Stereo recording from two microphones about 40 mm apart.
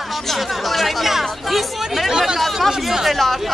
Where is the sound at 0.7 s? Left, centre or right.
Centre.